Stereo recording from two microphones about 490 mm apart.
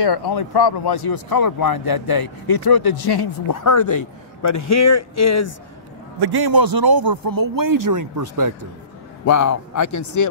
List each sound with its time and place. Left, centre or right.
0.0 s speech: left
6.1 s a man's voice: right
9.2 s a man's voice: left